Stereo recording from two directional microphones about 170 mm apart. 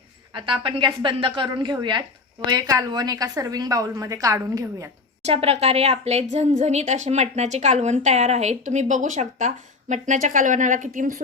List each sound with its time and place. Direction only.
0.3 s a woman's voice: 30° right (ahead or behind)
5.2 s a woman's voice: 35° right (ahead or behind)